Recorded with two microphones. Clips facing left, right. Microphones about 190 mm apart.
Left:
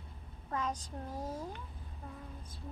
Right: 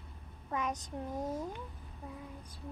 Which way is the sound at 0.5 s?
15° right (ahead or behind).